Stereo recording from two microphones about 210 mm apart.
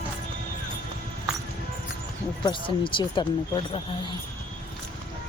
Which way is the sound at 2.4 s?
25° left (ahead or behind).